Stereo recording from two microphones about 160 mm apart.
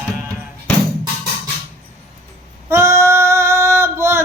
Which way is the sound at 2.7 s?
15° right (ahead or behind).